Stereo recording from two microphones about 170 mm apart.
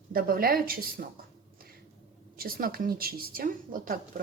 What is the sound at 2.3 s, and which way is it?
Speech, 60° right (ahead or behind).